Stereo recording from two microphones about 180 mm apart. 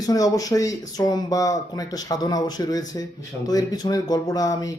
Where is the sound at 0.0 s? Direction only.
20° left (ahead or behind).